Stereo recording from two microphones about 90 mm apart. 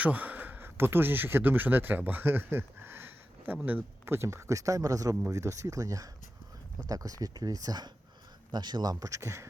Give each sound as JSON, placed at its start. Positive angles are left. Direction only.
{"t": 0.0, "sound": "speech", "side_deg": -20}